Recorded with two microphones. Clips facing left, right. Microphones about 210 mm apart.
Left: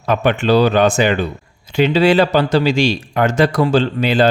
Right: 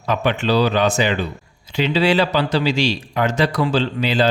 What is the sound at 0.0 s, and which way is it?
Speech, 50° left (ahead or behind).